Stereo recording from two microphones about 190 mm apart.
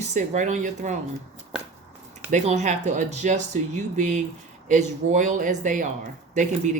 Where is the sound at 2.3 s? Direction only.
40° right (ahead or behind).